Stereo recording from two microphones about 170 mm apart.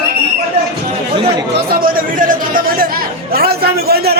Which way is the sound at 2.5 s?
55° right (ahead or behind).